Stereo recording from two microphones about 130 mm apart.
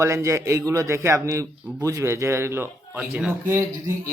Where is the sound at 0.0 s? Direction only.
20° right (ahead or behind).